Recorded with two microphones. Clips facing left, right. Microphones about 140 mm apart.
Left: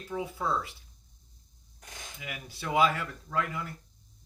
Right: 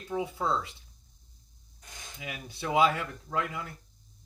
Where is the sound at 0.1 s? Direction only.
20° right (ahead or behind).